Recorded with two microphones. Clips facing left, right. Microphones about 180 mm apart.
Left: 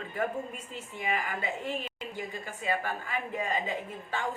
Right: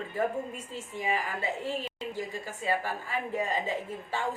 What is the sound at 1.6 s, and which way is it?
Speech, 35° right (ahead or behind).